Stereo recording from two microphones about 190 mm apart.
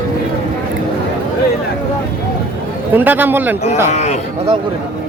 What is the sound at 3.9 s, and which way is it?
Speech, 35° left (ahead or behind).